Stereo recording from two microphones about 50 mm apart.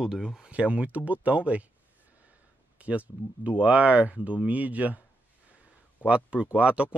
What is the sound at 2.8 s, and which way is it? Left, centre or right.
Speech, right.